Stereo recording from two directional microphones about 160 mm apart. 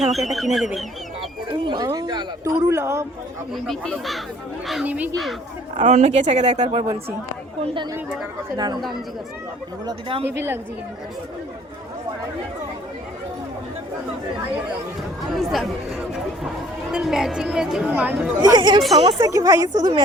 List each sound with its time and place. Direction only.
0.1 s a woman's voice: centre (ahead or behind)
1.5 s speech: 25° right (ahead or behind)
3.5 s a woman's voice: centre (ahead or behind)
5.7 s speech: 45° right (ahead or behind)
7.6 s speech: 30° right (ahead or behind)
9.8 s speech: 35° right (ahead or behind)
15.3 s a woman's voice: centre (ahead or behind)
16.9 s a woman's voice: 5° right (ahead or behind)
18.4 s speech: 25° right (ahead or behind)